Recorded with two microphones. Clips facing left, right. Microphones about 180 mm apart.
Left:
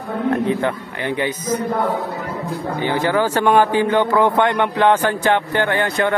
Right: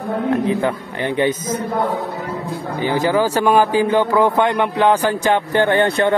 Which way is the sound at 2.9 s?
15° right (ahead or behind).